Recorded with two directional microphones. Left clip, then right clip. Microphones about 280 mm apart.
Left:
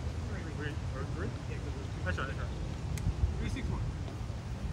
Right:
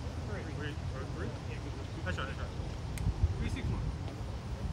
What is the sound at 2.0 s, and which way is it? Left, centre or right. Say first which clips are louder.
Vehicle: left 2 dB; centre.